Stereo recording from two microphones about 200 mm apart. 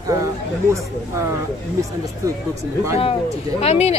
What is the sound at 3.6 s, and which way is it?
Speech, 30° left (ahead or behind).